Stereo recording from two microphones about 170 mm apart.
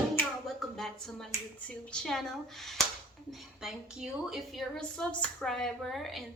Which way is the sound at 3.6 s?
Centre (ahead or behind).